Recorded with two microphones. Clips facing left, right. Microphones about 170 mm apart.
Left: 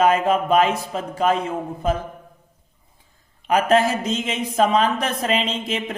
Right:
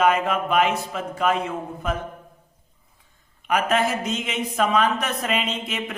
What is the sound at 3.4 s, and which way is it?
Speech, 35° left (ahead or behind).